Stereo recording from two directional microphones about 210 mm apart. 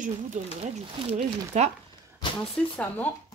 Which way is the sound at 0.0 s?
35° right (ahead or behind).